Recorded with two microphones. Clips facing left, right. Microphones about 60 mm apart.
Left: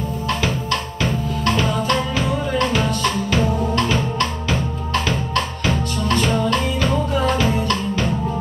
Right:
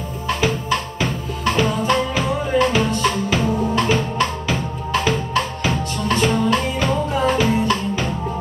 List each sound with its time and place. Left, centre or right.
1.5 s music: centre
2.9 s drum: centre
6.2 s music: centre